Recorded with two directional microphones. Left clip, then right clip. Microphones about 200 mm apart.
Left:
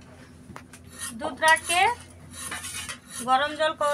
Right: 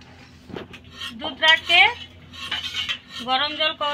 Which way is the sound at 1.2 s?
15° left (ahead or behind).